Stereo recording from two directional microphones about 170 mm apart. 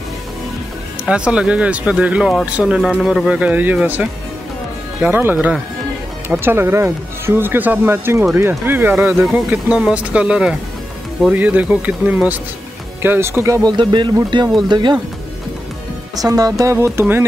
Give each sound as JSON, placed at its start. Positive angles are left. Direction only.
{"t": 1.0, "sound": "speech", "side_deg": -5}
{"t": 9.1, "sound": "speech", "side_deg": -5}
{"t": 16.2, "sound": "speech", "side_deg": -20}